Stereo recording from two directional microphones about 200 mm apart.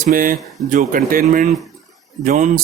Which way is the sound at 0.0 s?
45° right (ahead or behind).